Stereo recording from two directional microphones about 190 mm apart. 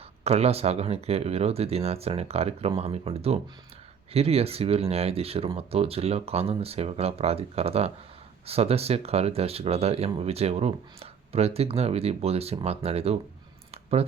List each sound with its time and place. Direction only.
0.3 s speech: 35° right (ahead or behind)